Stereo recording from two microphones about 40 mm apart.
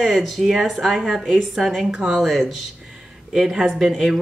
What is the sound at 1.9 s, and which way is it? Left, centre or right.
Speech, right.